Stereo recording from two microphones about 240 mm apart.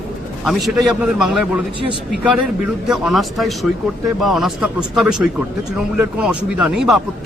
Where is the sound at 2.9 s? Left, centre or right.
Centre.